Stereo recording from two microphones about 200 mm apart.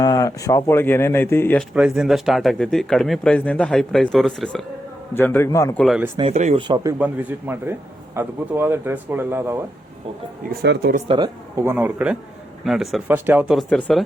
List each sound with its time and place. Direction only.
0.0 s speech: 15° left (ahead or behind)
1.7 s speech: 5° right (ahead or behind); by 5.8 s 15° left (ahead or behind)
5.8 s speech: centre (ahead or behind)
6.1 s speech: 30° right (ahead or behind)
7.0 s a man's voice: 10° right (ahead or behind)
10.5 s speech: 55° right (ahead or behind)
11.1 s a man's voice: 20° right (ahead or behind); by 14.0 s 5° left (ahead or behind)